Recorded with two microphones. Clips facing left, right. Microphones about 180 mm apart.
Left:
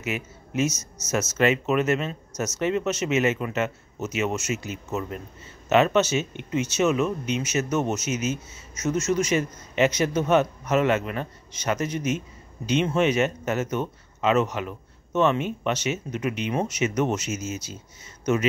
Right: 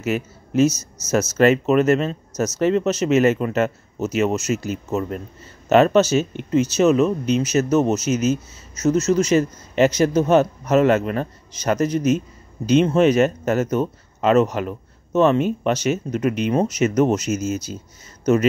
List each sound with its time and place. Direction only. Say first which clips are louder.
0.0 s speech: right 7 dB; 35° right (ahead or behind)